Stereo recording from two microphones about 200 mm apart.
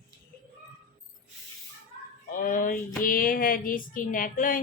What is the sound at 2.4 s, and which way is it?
Speech, 45° left (ahead or behind).